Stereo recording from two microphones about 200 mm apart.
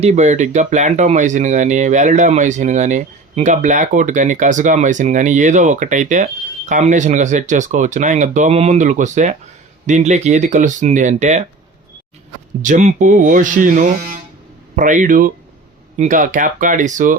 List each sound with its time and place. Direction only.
0.0 s speech: 35° right (ahead or behind)
12.6 s speech: 40° right (ahead or behind)